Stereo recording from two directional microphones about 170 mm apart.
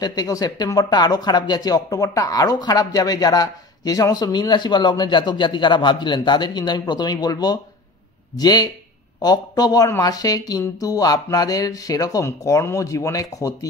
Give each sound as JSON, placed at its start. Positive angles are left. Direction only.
{"t": 0.0, "sound": "speech", "side_deg": 25}